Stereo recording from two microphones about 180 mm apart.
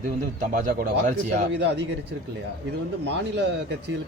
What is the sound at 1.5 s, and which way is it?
Speech, 75° right (ahead or behind).